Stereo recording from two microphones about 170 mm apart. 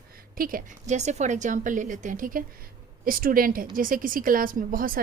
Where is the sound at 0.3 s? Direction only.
55° right (ahead or behind).